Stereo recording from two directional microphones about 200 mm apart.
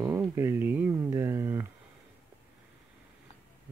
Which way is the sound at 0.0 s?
10° right (ahead or behind).